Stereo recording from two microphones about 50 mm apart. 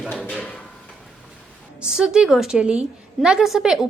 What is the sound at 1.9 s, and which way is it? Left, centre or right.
Speech, centre.